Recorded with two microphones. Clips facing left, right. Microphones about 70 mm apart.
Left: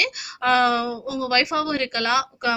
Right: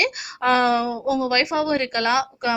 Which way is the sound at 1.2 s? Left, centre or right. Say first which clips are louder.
Left 3 dB; centre.